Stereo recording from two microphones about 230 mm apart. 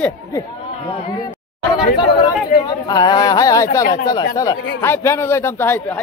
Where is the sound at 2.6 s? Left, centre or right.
Centre.